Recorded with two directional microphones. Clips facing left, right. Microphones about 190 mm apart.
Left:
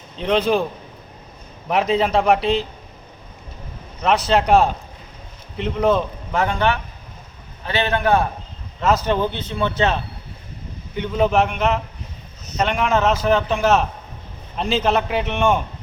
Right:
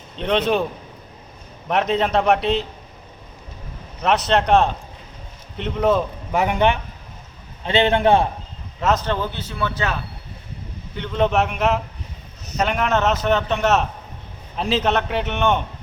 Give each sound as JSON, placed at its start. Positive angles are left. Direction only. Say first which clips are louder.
{"t": 0.2, "sound": "a man's voice", "louder": "left 1 dB", "side_deg": 0}
{"t": 1.6, "sound": "a man's voice", "louder": "left 1 dB", "side_deg": 0}
{"t": 4.0, "sound": "a man's voice", "louder": "left 1 dB", "side_deg": 0}
{"t": 6.3, "sound": "a man's voice", "louder": "right 1 dB", "side_deg": -20}
{"t": 9.0, "sound": "speech", "louder": "left 4 dB", "side_deg": 20}
{"t": 10.9, "sound": "a man's voice", "louder": "left 2 dB", "side_deg": 10}